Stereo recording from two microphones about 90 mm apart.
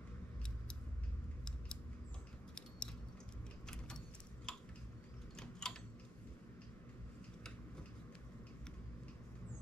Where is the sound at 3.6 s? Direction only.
10° left (ahead or behind).